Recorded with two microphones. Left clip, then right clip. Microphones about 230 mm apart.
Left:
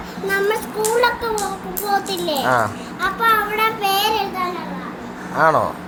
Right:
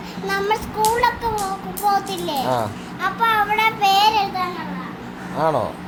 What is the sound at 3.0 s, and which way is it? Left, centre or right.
Child singing, centre.